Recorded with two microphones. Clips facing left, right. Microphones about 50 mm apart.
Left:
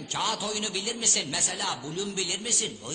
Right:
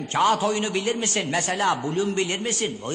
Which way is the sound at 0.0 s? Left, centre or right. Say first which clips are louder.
Right 10 dB; right.